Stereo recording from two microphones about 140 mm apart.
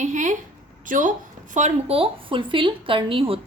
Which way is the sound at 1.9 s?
40° right (ahead or behind).